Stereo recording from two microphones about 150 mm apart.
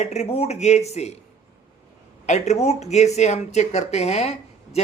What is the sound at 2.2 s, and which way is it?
Speech, 50° left (ahead or behind).